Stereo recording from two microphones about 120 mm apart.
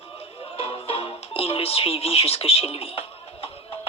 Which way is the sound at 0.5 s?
55° left (ahead or behind).